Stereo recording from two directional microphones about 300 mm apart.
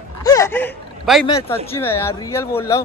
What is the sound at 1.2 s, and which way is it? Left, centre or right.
Speech, centre.